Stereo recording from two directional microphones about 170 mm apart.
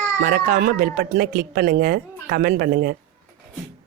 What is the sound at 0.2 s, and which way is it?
Speech, 55° right (ahead or behind).